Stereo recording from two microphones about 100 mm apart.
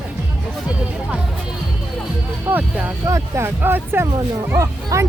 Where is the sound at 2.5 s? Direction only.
15° right (ahead or behind).